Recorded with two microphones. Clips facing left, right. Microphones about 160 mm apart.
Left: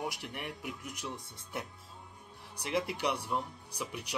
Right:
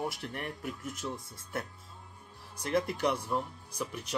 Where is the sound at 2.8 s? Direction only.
15° left (ahead or behind).